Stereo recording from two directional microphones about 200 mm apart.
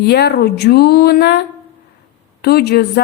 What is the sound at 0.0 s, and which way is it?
Speech, 55° left (ahead or behind).